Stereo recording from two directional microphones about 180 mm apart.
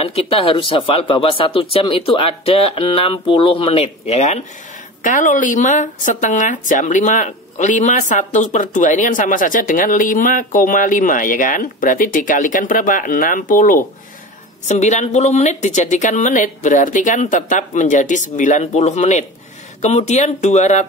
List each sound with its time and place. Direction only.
0.0 s a woman's voice: 30° left (ahead or behind)